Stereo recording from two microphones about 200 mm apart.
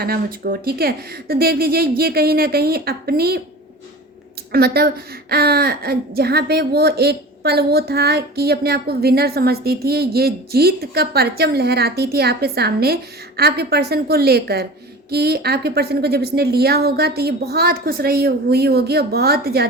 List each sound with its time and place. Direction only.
0.0 s a woman's voice: 50° right (ahead or behind)
4.5 s a woman's voice: 50° right (ahead or behind)